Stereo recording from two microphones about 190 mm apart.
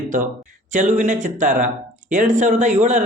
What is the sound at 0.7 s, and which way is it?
Speech, 40° right (ahead or behind).